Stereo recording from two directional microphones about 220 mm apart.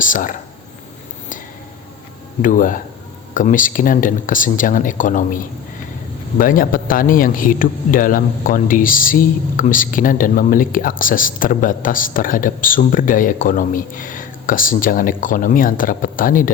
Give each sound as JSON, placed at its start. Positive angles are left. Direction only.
{"t": 0.0, "sound": "speech", "side_deg": 35}
{"t": 2.4, "sound": "a man's voice", "side_deg": 40}